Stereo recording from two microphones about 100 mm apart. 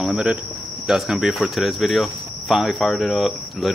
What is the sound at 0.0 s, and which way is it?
Cricket, 10° right (ahead or behind).